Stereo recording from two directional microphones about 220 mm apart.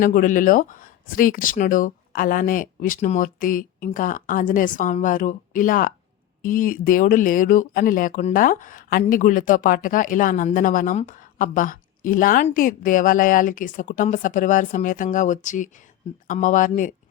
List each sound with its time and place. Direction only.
0.0 s speech: 40° left (ahead or behind)